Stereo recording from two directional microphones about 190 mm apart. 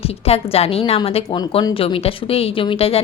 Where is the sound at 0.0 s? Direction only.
30° left (ahead or behind).